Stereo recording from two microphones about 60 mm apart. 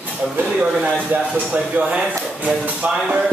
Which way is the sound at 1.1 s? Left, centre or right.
Right.